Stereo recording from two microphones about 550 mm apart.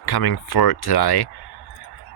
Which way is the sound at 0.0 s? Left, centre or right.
Left.